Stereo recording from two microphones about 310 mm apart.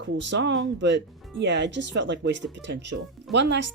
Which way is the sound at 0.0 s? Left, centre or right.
Right.